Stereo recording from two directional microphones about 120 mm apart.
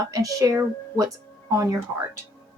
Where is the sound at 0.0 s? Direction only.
30° right (ahead or behind).